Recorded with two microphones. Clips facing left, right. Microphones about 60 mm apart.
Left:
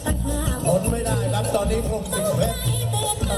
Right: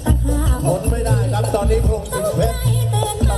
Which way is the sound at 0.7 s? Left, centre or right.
Right.